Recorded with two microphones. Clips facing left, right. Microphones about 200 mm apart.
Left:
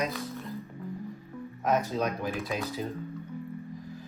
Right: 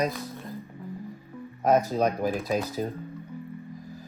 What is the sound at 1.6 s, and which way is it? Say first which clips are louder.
Speech: right 5 dB; 40° right (ahead or behind).